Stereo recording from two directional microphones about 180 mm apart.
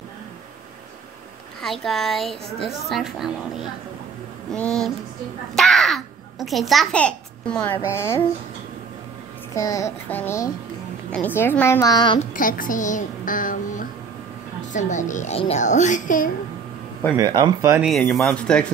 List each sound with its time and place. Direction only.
1.6 s a woman's voice: centre (ahead or behind)
9.5 s a woman's voice: 20° left (ahead or behind)
12.4 s a woman's voice: 50° left (ahead or behind)
17.2 s speech: 25° right (ahead or behind)
18.1 s a woman's voice: 5° left (ahead or behind)